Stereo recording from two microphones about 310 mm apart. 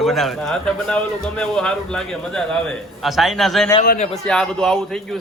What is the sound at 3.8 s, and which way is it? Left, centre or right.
Speech, left.